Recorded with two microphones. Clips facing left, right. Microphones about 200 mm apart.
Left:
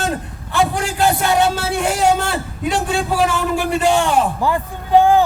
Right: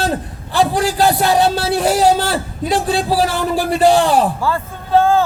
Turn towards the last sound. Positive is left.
turn(degrees=15)  # may be behind; listen again after turning